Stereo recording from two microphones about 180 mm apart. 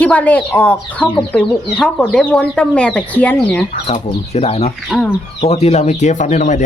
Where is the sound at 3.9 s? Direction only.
35° left (ahead or behind).